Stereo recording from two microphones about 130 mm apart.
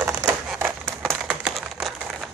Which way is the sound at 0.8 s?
Centre (ahead or behind).